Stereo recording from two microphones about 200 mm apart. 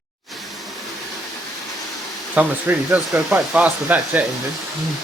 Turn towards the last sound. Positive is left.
turn(degrees=-5)  # may be behind; listen again after turning